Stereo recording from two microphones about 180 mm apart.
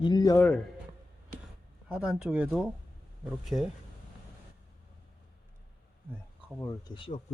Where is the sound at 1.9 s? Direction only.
5° right (ahead or behind).